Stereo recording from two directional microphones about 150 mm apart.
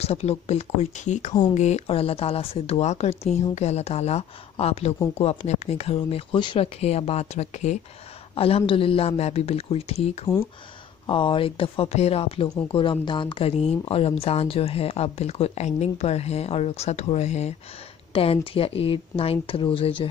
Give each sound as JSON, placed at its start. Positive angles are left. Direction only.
{"t": 0.0, "sound": "speech", "side_deg": 45}
{"t": 8.4, "sound": "speech", "side_deg": 40}
{"t": 18.1, "sound": "speech", "side_deg": 40}